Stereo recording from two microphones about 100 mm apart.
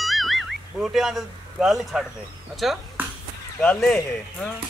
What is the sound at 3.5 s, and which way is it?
Speech, 10° left (ahead or behind).